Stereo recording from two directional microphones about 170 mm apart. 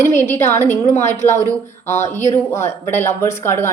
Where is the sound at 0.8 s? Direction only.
40° left (ahead or behind).